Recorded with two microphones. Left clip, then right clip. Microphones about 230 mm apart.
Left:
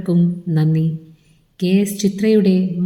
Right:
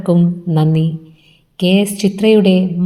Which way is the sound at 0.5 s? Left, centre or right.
Centre.